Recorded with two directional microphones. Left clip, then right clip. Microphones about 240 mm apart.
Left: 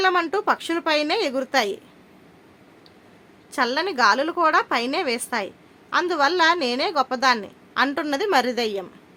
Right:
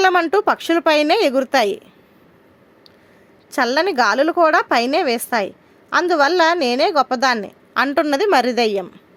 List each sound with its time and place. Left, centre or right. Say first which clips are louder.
0.0 s a woman's voice: right 6 dB; right
3.5 s a woman's voice: right 6 dB; right